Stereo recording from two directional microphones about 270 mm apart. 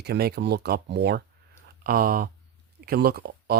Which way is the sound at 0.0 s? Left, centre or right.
Right.